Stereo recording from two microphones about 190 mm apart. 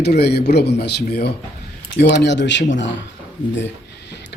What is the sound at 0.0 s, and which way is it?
Speech, 60° left (ahead or behind).